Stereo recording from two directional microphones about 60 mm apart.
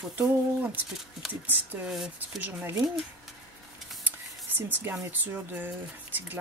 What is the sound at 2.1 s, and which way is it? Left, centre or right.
Speech, right.